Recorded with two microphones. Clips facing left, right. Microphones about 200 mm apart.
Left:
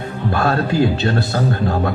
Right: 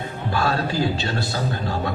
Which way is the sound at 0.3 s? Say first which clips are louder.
Left 5 dB; 55° left (ahead or behind).